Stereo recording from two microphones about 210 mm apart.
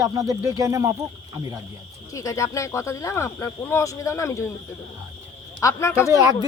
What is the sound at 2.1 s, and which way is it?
Speech, 15° left (ahead or behind).